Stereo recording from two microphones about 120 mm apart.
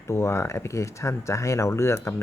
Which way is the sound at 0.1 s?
20° left (ahead or behind).